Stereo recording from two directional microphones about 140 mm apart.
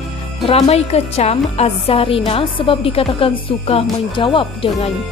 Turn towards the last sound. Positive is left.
turn(degrees=35)  # may be behind; listen again after turning